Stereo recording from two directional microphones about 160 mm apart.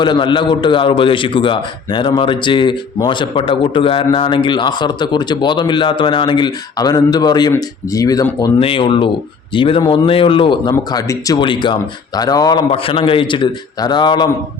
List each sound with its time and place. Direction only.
0.0 s a man's voice: 30° left (ahead or behind)